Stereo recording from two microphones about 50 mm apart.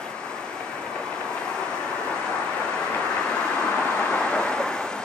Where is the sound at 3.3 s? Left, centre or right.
Centre.